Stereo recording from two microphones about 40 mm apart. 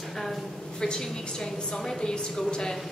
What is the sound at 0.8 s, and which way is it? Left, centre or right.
A woman's voice, centre.